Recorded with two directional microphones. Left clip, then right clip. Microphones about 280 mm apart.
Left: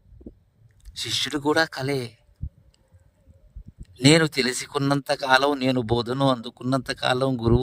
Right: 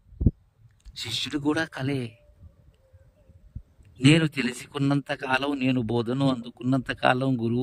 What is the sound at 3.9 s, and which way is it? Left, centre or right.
Speech, centre.